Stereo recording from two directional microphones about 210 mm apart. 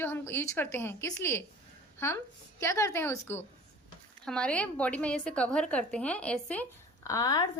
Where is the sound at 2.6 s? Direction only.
15° left (ahead or behind).